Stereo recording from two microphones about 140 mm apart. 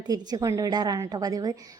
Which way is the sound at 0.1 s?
25° right (ahead or behind).